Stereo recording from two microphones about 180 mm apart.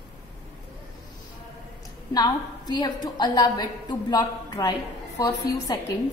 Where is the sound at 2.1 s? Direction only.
20° left (ahead or behind).